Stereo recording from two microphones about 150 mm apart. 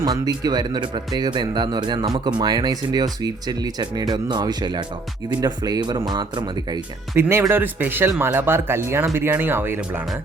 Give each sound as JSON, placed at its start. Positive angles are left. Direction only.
{"t": 0.0, "sound": "speech", "side_deg": -25}
{"t": 7.2, "sound": "speech", "side_deg": -15}